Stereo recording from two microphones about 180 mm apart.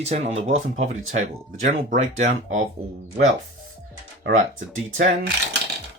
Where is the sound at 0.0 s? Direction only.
35° right (ahead or behind).